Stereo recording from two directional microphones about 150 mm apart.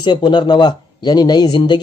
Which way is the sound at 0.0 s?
30° left (ahead or behind).